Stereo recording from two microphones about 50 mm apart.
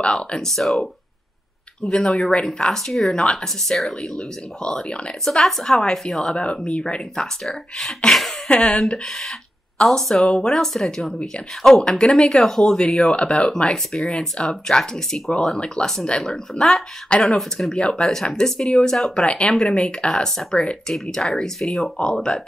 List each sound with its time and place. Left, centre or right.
0.0 s speech: centre
1.9 s speech: centre
4.6 s speech: centre
9.8 s speech: centre
11.1 s speech: centre
17.7 s speech: left